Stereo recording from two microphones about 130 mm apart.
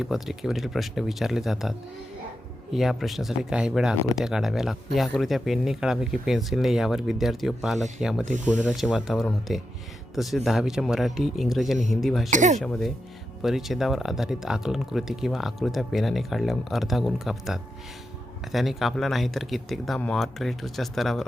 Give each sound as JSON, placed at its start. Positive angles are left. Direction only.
{"t": 0.0, "sound": "speech", "side_deg": 0}
{"t": 2.7, "sound": "speech", "side_deg": 0}
{"t": 12.3, "sound": "speech", "side_deg": -70}
{"t": 12.5, "sound": "speech", "side_deg": 5}